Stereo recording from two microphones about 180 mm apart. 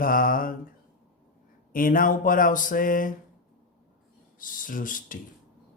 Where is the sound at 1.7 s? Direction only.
50° left (ahead or behind).